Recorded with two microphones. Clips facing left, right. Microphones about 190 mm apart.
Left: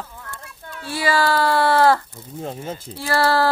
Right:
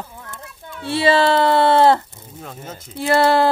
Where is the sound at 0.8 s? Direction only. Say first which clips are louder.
Right 5 dB; 25° right (ahead or behind).